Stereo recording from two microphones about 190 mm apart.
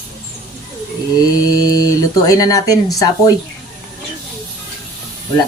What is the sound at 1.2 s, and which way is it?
Speech, 20° left (ahead or behind).